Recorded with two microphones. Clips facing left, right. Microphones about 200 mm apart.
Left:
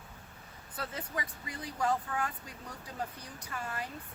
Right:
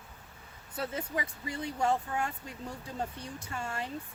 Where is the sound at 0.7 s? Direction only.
25° right (ahead or behind).